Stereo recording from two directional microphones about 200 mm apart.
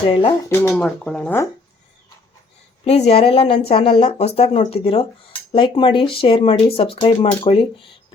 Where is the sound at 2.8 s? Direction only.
30° left (ahead or behind).